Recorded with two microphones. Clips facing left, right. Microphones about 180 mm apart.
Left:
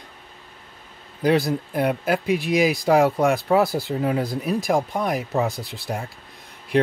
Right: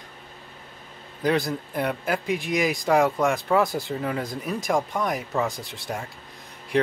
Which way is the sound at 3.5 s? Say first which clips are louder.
Left 3 dB; 35° left (ahead or behind).